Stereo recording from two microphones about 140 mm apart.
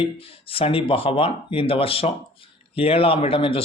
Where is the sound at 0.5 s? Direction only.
40° left (ahead or behind).